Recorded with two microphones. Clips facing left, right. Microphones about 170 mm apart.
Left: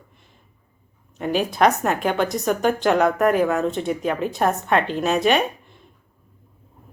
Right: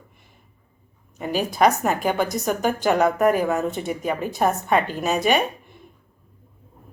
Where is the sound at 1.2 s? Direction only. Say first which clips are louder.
Left 1 dB; 5° right (ahead or behind).